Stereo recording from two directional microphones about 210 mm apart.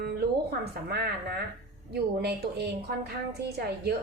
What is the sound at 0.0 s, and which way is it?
A woman's voice, 50° right (ahead or behind).